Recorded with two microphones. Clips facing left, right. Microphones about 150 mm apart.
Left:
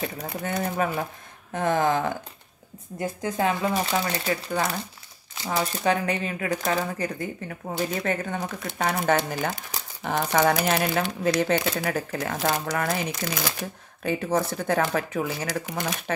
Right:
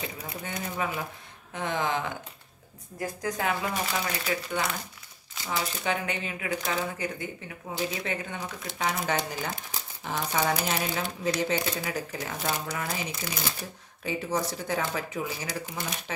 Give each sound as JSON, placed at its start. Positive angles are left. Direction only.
{"t": 0.0, "sound": "speech", "side_deg": 50}
{"t": 3.0, "sound": "a woman's voice", "side_deg": 25}
{"t": 5.5, "sound": "speech", "side_deg": 40}
{"t": 7.7, "sound": "speech", "side_deg": 50}
{"t": 14.0, "sound": "speech", "side_deg": 55}